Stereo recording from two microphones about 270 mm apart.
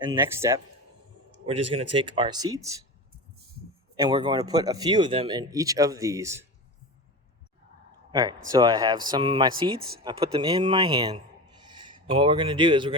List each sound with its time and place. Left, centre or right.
0.0 s speech: centre
1.5 s speech: right
3.9 s speech: centre
8.1 s speech: centre